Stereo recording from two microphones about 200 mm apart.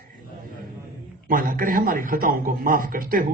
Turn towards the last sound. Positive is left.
turn(degrees=-45)  # may be behind; listen again after turning